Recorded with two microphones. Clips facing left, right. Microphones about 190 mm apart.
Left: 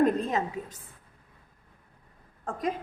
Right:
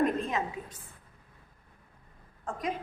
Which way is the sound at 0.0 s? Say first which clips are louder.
Left 4 dB; 40° left (ahead or behind).